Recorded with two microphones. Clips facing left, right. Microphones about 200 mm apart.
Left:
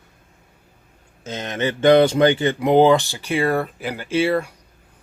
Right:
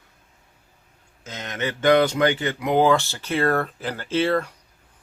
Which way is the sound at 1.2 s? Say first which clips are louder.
Left 5 dB; 30° left (ahead or behind).